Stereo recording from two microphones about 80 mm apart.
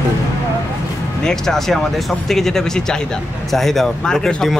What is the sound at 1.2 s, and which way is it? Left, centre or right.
Speech, centre.